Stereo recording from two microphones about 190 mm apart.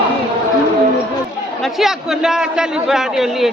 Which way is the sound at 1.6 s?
Centre (ahead or behind).